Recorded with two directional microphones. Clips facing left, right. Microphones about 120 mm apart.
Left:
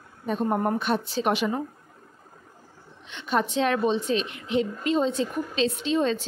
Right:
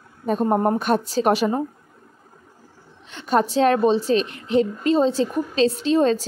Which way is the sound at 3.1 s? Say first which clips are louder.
Right 5 dB; 40° right (ahead or behind).